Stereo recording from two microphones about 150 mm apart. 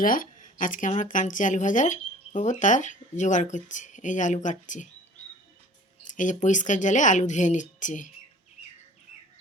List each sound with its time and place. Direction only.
0.0 s speech: 70° left (ahead or behind)
6.1 s speech: 55° left (ahead or behind)